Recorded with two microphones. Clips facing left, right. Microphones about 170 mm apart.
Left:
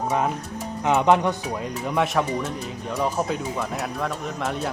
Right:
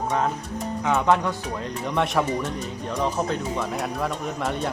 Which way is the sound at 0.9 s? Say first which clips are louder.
Left 3 dB; 20° left (ahead or behind).